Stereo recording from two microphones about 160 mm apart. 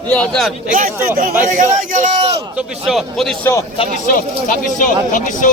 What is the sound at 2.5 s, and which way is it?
Speech, centre (ahead or behind).